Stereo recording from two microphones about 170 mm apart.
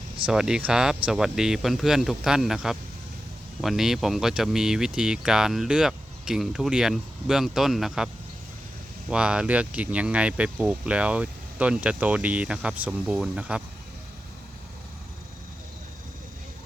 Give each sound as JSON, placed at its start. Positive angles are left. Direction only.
{"t": 0.3, "sound": "speech", "side_deg": -5}